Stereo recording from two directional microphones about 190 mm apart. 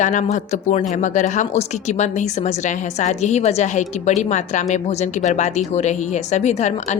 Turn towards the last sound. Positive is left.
turn(degrees=35)  # may be behind; listen again after turning